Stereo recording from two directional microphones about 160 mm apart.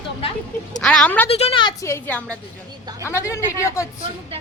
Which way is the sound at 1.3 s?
35° left (ahead or behind).